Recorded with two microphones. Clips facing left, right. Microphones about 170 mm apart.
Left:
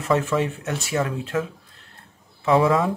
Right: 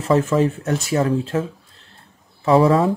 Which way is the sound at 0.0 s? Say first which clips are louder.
Right 5 dB; 35° right (ahead or behind).